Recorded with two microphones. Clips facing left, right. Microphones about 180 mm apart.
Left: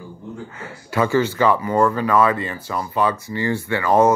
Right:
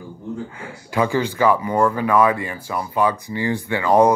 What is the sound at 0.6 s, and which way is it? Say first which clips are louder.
Speech: left 1 dB; 15° right (ahead or behind).